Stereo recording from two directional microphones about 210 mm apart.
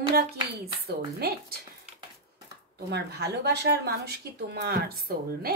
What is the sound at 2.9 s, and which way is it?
Speech, 50° right (ahead or behind).